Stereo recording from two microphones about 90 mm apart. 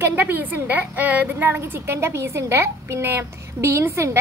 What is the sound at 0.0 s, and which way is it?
A woman's voice, 20° right (ahead or behind).